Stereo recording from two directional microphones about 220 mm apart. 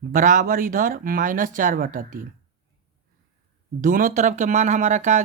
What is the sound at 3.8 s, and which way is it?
Speech, 40° right (ahead or behind).